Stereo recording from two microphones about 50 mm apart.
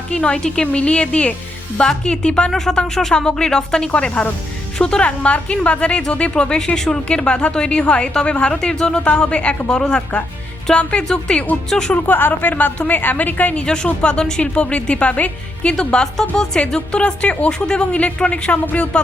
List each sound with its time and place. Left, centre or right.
0.1 s a woman's voice: left
12.0 s a woman's voice: left
13.7 s a woman's voice: centre